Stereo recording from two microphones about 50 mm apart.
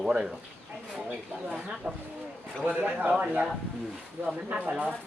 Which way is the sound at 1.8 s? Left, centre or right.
Right.